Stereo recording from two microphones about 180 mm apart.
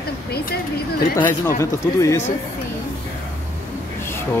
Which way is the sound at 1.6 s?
15° left (ahead or behind).